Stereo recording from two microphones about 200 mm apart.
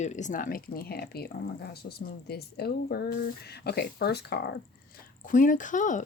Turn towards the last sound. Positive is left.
turn(degrees=40)  # may be behind; listen again after turning